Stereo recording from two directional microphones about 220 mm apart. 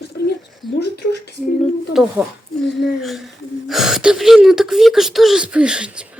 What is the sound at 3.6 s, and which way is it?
Speech, centre (ahead or behind).